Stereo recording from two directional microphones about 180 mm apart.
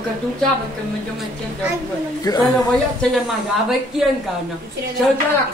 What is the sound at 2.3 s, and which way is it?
Speech, 20° left (ahead or behind).